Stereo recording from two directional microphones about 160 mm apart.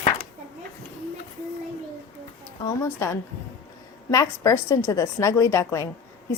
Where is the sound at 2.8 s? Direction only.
15° left (ahead or behind).